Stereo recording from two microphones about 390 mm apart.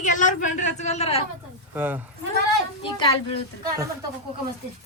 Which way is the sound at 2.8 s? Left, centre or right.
Centre.